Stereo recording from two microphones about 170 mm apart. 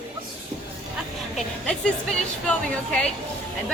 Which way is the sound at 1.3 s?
5° left (ahead or behind).